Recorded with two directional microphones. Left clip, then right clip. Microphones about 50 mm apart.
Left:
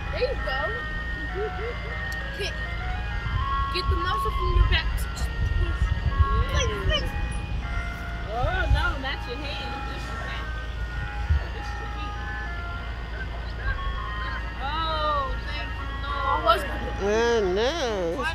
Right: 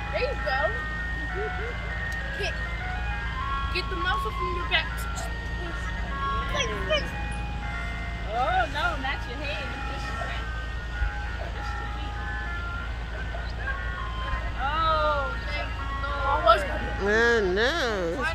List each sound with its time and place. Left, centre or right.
0.1 s ice cream truck: right
3.7 s speech: right
6.5 s speech: right
8.5 s speech: right
14.7 s vehicle: right
16.5 s speech: right